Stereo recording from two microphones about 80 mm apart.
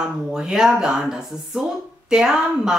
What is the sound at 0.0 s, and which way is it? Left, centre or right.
Speech, centre.